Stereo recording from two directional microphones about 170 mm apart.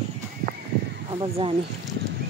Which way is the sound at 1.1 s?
30° right (ahead or behind).